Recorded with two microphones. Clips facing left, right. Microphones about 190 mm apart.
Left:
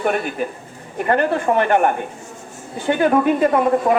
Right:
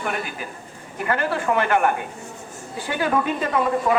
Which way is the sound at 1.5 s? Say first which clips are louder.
Left 3 dB; 35° left (ahead or behind).